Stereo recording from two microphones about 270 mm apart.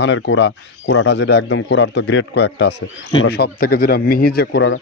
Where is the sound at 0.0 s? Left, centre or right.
Left.